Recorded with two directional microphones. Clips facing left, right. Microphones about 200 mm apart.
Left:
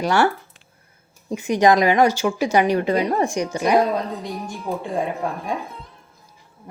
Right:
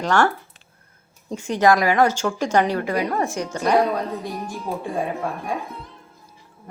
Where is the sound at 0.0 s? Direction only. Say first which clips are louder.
Left 1 dB; 10° left (ahead or behind).